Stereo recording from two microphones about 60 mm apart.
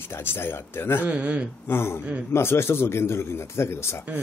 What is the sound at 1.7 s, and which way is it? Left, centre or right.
A man's voice, left.